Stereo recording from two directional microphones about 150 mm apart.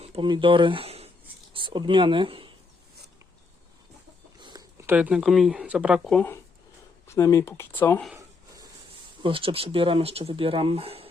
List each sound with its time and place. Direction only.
0.0 s speech: 35° right (ahead or behind)
1.5 s speech: 30° right (ahead or behind)
4.4 s chicken: 30° right (ahead or behind)
4.8 s speech: 10° right (ahead or behind)
6.1 s speech: 10° left (ahead or behind)
9.2 s speech: 35° right (ahead or behind)